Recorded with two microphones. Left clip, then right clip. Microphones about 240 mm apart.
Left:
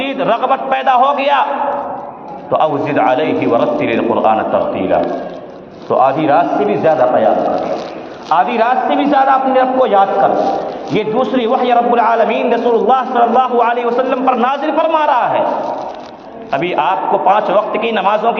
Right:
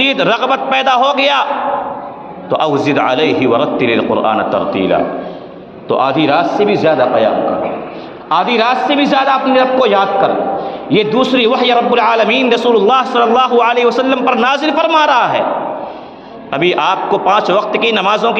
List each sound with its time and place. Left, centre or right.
0.0 s a man's voice: right
2.5 s a man's voice: right
8.3 s a man's voice: right
16.5 s a man's voice: right